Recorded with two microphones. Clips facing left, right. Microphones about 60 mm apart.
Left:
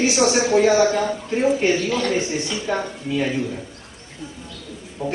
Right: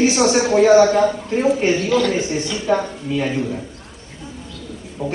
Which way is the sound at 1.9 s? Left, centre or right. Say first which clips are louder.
Right 3 dB; left.